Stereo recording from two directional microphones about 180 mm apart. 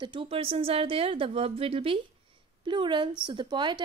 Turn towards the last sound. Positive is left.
turn(degrees=-25)  # may be behind; listen again after turning